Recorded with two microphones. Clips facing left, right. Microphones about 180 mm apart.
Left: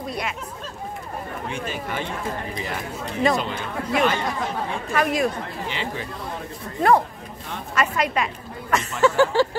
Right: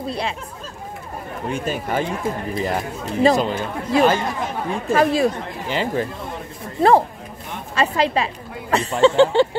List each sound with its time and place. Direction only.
0.0 s speech: 30° right (ahead or behind)
1.5 s a woman's voice: 40° right (ahead or behind); by 9.6 s 25° right (ahead or behind)